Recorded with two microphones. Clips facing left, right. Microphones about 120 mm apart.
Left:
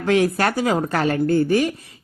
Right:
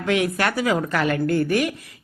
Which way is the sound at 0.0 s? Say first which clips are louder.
Left 3 dB; 35° left (ahead or behind).